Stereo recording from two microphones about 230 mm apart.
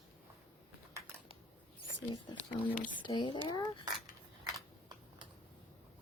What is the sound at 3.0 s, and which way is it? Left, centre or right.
Speech, centre.